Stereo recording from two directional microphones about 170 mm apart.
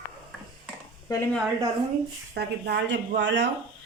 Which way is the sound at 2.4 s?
75° right (ahead or behind).